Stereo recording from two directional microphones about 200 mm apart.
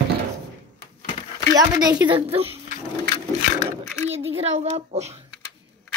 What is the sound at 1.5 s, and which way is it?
Speech, 20° right (ahead or behind).